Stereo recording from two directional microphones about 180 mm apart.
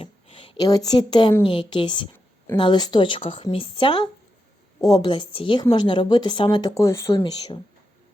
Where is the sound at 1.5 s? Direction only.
25° left (ahead or behind).